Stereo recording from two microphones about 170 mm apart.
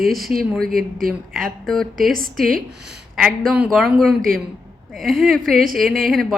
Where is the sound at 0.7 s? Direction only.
60° right (ahead or behind).